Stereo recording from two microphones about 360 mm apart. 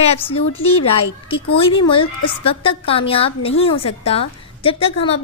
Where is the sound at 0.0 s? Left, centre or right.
Centre.